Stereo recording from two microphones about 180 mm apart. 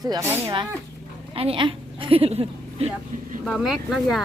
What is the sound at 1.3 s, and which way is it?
A woman's voice, 30° right (ahead or behind).